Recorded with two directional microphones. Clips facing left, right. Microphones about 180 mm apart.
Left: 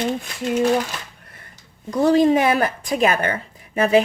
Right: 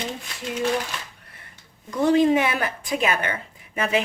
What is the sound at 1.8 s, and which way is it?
A woman's voice, 40° left (ahead or behind).